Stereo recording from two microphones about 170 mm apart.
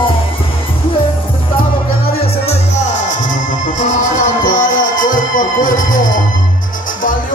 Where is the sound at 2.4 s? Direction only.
45° left (ahead or behind).